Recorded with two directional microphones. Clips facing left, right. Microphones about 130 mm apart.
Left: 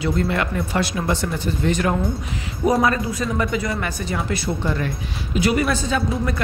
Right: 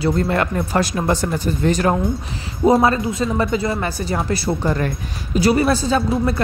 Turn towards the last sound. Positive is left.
turn(degrees=-35)  # may be behind; listen again after turning